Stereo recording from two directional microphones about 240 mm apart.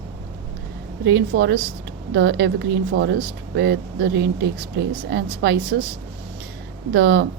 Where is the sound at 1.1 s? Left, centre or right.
Right.